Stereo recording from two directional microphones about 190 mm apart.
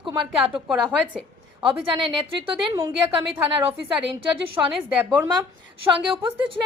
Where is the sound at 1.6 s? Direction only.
25° right (ahead or behind).